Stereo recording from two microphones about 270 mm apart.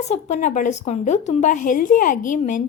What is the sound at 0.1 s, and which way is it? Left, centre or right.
A woman's voice, left.